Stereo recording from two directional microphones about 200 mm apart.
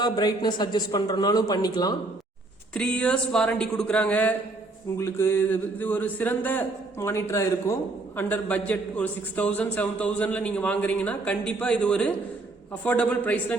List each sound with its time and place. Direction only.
0.0 s a man's voice: 20° left (ahead or behind)
2.7 s a man's voice: 5° left (ahead or behind)